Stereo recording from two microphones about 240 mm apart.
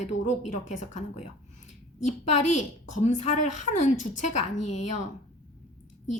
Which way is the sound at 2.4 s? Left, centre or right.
Left.